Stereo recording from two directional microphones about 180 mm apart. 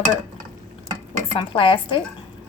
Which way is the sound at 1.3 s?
30° left (ahead or behind).